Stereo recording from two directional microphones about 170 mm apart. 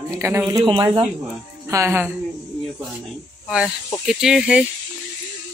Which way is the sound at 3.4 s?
5° right (ahead or behind).